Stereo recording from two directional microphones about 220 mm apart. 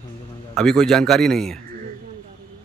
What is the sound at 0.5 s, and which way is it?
Speech, centre (ahead or behind).